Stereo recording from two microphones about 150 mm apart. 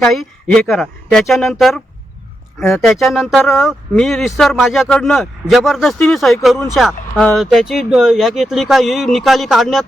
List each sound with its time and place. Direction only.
0.0 s speech: centre (ahead or behind)